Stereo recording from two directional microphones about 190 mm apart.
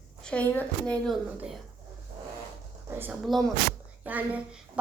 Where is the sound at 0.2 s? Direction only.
5° left (ahead or behind).